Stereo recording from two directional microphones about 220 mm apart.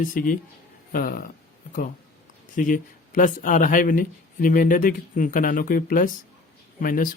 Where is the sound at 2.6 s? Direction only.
35° left (ahead or behind).